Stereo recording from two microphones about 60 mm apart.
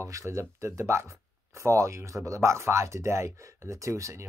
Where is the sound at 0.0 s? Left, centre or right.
Right.